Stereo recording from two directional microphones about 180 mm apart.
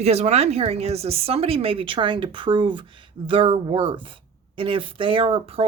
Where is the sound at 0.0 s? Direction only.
35° right (ahead or behind).